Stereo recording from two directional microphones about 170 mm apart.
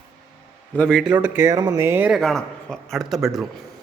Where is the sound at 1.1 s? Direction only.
10° right (ahead or behind).